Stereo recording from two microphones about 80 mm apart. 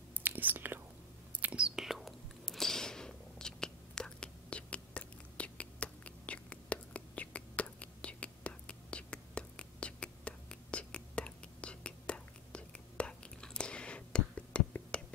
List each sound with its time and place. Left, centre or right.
0.1 s whispering: right
1.8 s whispering: centre